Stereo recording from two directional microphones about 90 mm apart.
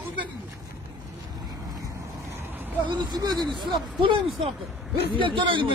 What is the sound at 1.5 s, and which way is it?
Vehicle, 40° right (ahead or behind).